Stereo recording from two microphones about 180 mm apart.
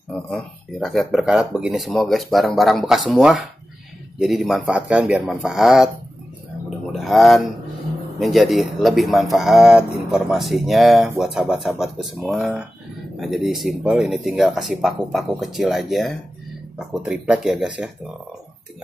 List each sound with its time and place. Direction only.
0.3 s speech: centre (ahead or behind)
6.9 s speech: centre (ahead or behind)